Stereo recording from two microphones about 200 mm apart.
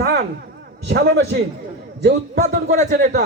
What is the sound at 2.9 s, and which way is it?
Speech, 45° right (ahead or behind).